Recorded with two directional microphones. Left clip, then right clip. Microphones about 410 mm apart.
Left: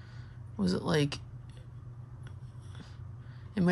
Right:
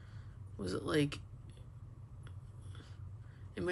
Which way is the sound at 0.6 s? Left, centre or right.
Centre.